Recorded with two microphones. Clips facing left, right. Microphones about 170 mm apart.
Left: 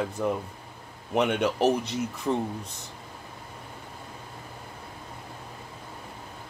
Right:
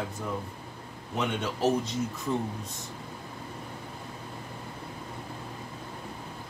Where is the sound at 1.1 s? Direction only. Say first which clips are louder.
Left 7 dB; 70° left (ahead or behind).